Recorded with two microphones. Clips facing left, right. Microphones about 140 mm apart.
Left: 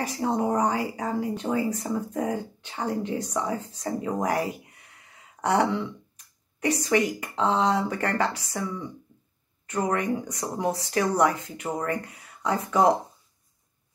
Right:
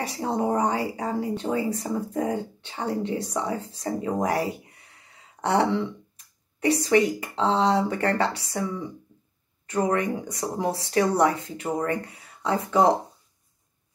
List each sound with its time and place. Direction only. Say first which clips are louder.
0.0 s speech: even; 30° right (ahead or behind)